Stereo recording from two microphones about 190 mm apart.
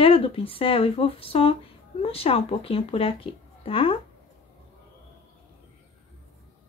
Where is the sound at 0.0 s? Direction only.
30° left (ahead or behind).